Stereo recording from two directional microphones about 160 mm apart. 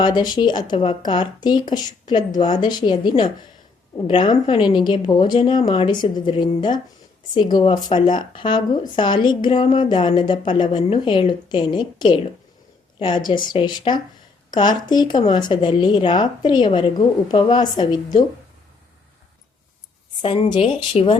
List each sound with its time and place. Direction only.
0.0 s a woman's voice: 25° left (ahead or behind)
20.2 s speech: 30° left (ahead or behind)